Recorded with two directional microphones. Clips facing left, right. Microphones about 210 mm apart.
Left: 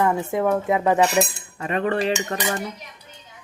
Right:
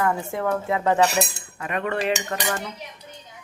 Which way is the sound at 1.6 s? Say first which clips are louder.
Left 3 dB; 30° left (ahead or behind).